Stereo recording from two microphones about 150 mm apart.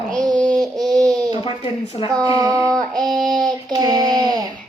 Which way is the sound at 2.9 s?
5° left (ahead or behind).